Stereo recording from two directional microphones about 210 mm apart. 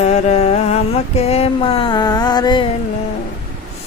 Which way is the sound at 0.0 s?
30° left (ahead or behind).